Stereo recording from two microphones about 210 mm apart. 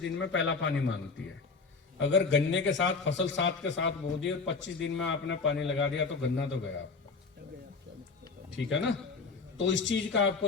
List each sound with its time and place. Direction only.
0.0 s a man's voice: 60° left (ahead or behind)
2.0 s a man's voice: 60° left (ahead or behind)
8.5 s a man's voice: 60° left (ahead or behind)